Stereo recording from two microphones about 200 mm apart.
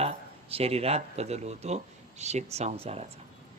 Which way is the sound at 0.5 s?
30° right (ahead or behind).